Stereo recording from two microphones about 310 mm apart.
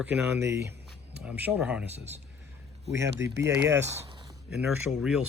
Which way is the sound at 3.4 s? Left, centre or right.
Centre.